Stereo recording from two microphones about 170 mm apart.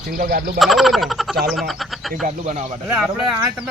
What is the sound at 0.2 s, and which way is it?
Speech, 55° right (ahead or behind).